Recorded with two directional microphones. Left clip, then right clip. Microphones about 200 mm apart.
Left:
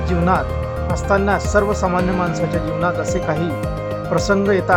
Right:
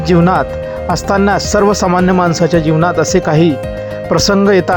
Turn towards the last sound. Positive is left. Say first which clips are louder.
# right 6 dB
turn(degrees=-35)  # may be behind; listen again after turning